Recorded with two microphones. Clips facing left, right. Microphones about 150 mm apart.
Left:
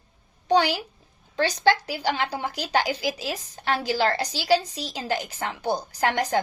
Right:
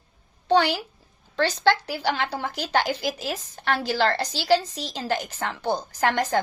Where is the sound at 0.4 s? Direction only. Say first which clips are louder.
Right 1 dB; 15° left (ahead or behind).